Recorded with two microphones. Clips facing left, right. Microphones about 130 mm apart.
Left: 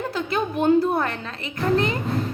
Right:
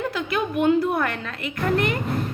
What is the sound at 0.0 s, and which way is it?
Speech, 30° left (ahead or behind).